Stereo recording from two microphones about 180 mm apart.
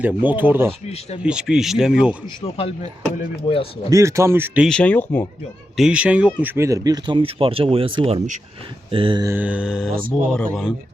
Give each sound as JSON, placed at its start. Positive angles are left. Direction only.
{"t": 0.0, "sound": "speech", "side_deg": -10}
{"t": 2.4, "sound": "speech", "side_deg": 35}
{"t": 3.8, "sound": "speech", "side_deg": -15}
{"t": 4.7, "sound": "speech", "side_deg": 5}
{"t": 5.7, "sound": "speech", "side_deg": -5}
{"t": 9.2, "sound": "speech", "side_deg": -10}